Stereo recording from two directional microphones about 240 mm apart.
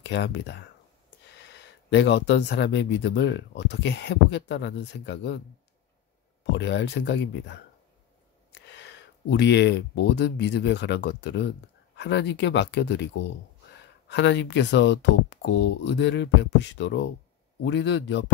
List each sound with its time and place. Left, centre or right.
0.0 s speech: left
6.5 s speech: left